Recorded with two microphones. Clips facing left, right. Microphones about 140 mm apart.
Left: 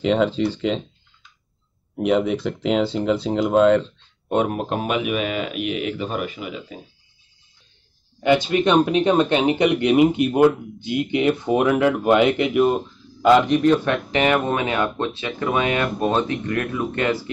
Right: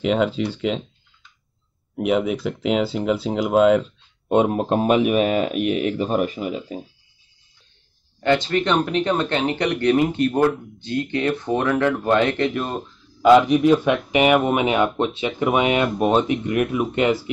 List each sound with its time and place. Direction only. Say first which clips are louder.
0.0 s speech: left 1 dB; 5° right (ahead or behind)
2.0 s speech: left 1 dB; 5° right (ahead or behind)
4.3 s speech: right 3 dB; 20° right (ahead or behind)
8.2 s speech: left 1 dB; 10° left (ahead or behind)
13.2 s speech: right 2 dB; 5° right (ahead or behind)